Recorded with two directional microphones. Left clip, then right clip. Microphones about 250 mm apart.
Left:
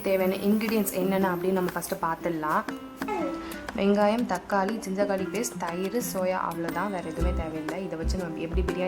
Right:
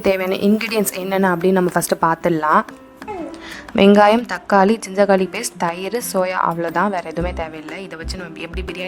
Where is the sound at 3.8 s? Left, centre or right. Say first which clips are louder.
Right 13 dB; right.